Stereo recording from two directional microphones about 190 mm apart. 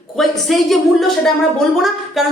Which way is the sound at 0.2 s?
Centre (ahead or behind).